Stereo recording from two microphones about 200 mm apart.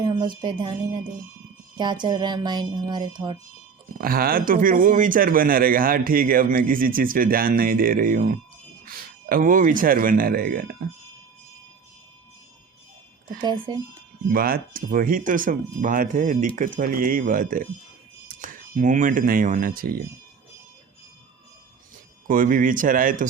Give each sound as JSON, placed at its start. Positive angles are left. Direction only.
{"t": 0.0, "sound": "speech", "side_deg": -25}
{"t": 3.9, "sound": "speech", "side_deg": -45}
{"t": 13.2, "sound": "speech", "side_deg": -20}
{"t": 14.3, "sound": "speech", "side_deg": -50}
{"t": 22.3, "sound": "speech", "side_deg": -45}